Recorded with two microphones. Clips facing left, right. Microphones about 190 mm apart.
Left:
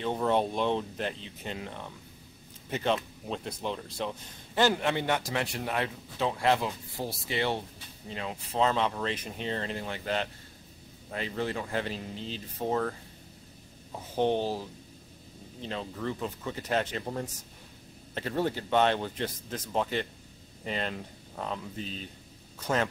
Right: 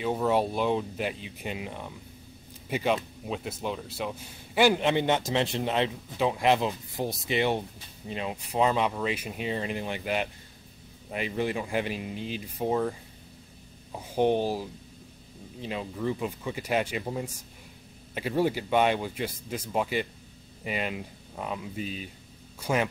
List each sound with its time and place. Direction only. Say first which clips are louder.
0.0 s a man's voice: right 2 dB; 5° right (ahead or behind)
13.9 s a man's voice: right 3 dB; 10° right (ahead or behind)